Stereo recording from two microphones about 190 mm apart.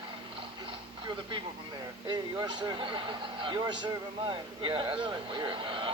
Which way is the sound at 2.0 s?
20° right (ahead or behind).